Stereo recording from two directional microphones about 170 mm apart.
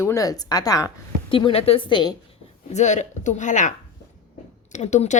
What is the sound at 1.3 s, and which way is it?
Speech, 30° left (ahead or behind).